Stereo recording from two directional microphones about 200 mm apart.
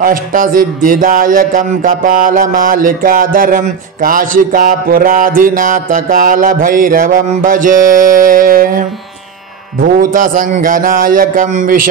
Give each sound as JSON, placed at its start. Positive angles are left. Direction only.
{"t": 0.0, "sound": "speech", "side_deg": -45}
{"t": 9.9, "sound": "speech", "side_deg": -45}